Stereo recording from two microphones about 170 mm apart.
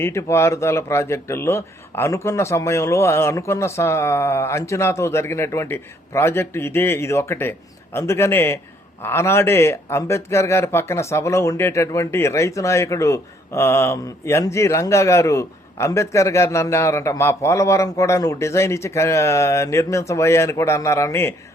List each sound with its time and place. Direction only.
0.0 s a man's voice: 15° left (ahead or behind)